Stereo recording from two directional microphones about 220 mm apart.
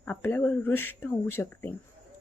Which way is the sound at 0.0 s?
10° left (ahead or behind).